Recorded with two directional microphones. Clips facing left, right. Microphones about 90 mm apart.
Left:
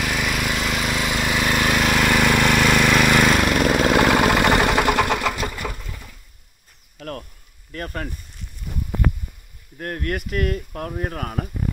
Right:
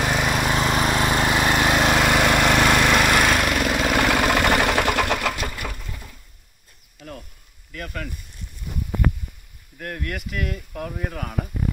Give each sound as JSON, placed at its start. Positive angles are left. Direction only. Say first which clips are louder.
{"t": 0.0, "sound": "vehicle", "louder": "right 2 dB", "side_deg": -25}
{"t": 3.1, "sound": "lawn mower", "louder": "left 2 dB", "side_deg": -5}
{"t": 3.6, "sound": "vehicle", "louder": "left 4 dB", "side_deg": 20}
{"t": 7.0, "sound": "a sound", "louder": "left 6 dB", "side_deg": 65}
{"t": 7.7, "sound": "a sound", "louder": "left 3 dB", "side_deg": 40}
{"t": 9.8, "sound": "speech", "louder": "left 4 dB", "side_deg": 40}